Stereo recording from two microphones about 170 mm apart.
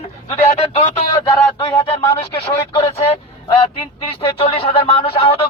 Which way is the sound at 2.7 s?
25° left (ahead or behind).